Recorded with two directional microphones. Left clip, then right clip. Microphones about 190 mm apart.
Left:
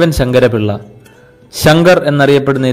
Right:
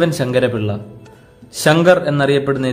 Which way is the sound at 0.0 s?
30° left (ahead or behind).